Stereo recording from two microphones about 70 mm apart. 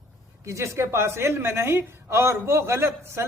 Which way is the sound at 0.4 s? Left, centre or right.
Right.